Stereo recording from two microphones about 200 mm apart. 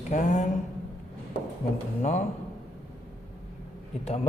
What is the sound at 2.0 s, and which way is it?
Speech, 35° left (ahead or behind).